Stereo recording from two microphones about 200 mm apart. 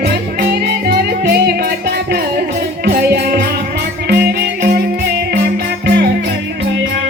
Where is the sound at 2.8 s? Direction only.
50° right (ahead or behind).